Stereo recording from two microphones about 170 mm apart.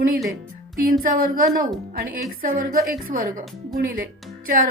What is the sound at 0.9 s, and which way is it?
A woman's voice, 55° right (ahead or behind).